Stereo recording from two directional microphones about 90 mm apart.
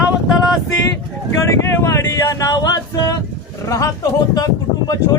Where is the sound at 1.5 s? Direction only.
35° left (ahead or behind).